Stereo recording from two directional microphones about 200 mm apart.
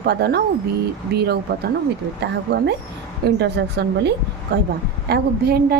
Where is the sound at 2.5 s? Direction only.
60° right (ahead or behind).